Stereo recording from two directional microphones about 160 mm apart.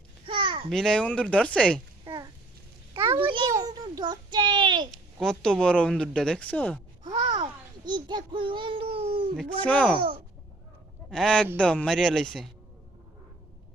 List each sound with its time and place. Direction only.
0.3 s babbling: 30° right (ahead or behind)
0.7 s speech: 5° left (ahead or behind)
2.0 s a sound: 25° right (ahead or behind)
3.5 s child singing: 25° right (ahead or behind)
4.9 s speech: 5° left (ahead or behind)
7.0 s a sound: 30° right (ahead or behind)
7.9 s a child's voice: 30° right (ahead or behind)
9.6 s speech: 10° left (ahead or behind)
11.1 s speech: 5° left (ahead or behind)